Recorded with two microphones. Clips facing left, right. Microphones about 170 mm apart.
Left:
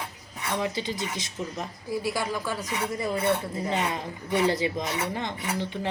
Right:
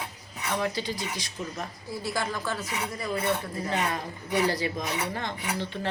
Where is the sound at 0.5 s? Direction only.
20° left (ahead or behind).